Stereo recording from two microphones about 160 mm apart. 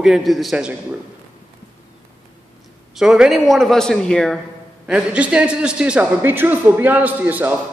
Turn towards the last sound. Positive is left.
turn(degrees=-10)  # may be behind; listen again after turning